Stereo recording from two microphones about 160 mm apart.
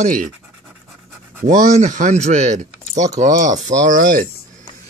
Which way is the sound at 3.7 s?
55° right (ahead or behind).